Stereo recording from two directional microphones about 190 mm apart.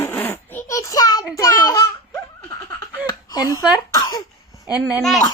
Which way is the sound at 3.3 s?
20° left (ahead or behind).